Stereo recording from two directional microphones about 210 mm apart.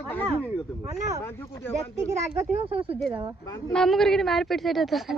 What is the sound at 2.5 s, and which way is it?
Speech, 30° right (ahead or behind).